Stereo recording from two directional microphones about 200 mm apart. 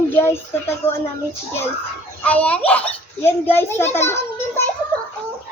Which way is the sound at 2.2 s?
5° left (ahead or behind).